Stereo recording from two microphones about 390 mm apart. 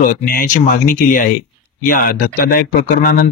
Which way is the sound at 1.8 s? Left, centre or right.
Left.